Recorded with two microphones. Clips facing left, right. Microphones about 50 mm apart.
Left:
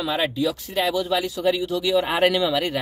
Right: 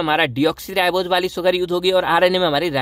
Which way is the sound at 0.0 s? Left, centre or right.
Right.